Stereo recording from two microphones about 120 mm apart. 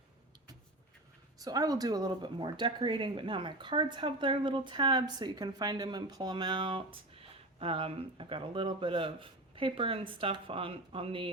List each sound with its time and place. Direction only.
1.4 s speech: 30° right (ahead or behind); by 11.3 s 50° right (ahead or behind)